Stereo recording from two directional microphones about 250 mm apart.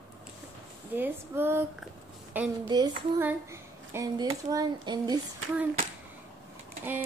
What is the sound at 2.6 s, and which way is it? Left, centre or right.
Speech, centre.